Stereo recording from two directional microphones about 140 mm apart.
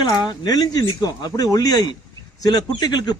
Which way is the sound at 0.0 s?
30° left (ahead or behind).